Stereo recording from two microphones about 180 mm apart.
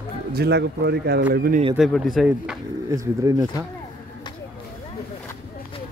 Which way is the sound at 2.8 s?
20° right (ahead or behind).